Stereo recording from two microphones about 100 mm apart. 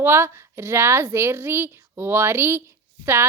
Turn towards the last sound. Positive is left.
turn(degrees=-25)  # may be behind; listen again after turning